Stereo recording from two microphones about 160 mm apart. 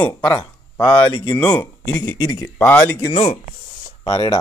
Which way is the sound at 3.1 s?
40° left (ahead or behind).